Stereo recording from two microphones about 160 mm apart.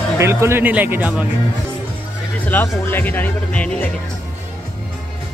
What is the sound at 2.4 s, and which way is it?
Speech, 10° left (ahead or behind).